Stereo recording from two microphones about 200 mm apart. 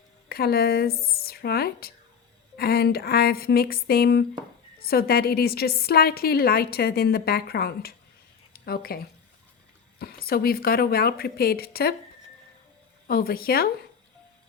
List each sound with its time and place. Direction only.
0.3 s a woman's voice: 50° left (ahead or behind)
10.0 s a woman's voice: 50° left (ahead or behind)
13.1 s a woman's voice: 50° left (ahead or behind)